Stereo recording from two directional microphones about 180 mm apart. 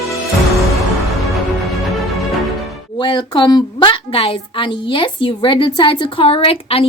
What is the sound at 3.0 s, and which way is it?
A woman's voice, 25° left (ahead or behind).